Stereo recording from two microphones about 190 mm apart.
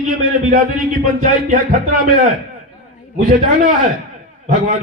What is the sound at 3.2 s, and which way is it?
Speech, 50° right (ahead or behind).